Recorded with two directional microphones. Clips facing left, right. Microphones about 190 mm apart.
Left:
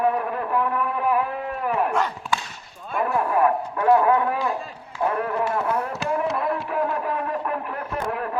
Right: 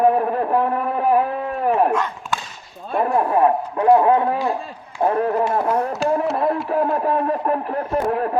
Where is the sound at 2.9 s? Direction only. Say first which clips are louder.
Right 4 dB; 35° right (ahead or behind).